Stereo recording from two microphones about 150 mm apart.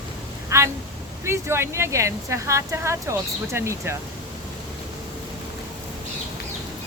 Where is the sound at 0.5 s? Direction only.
20° right (ahead or behind).